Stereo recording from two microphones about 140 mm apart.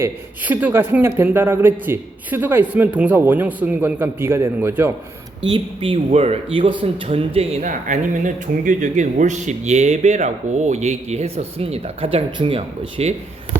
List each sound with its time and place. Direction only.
0.0 s a man's voice: 10° right (ahead or behind)
5.5 s speech: 35° right (ahead or behind)
6.1 s speech: 50° right (ahead or behind)
7.6 s speech: 70° right (ahead or behind); by 13.1 s 45° right (ahead or behind)